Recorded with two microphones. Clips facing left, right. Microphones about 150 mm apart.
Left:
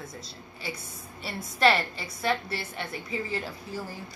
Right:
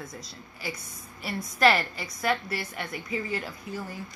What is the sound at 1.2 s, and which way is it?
A woman's voice, 30° left (ahead or behind).